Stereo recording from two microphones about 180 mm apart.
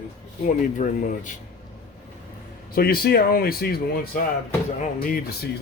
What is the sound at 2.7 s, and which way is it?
Speech, 55° left (ahead or behind).